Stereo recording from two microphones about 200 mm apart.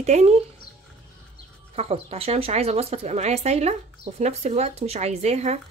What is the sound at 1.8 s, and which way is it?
Speech, 30° right (ahead or behind).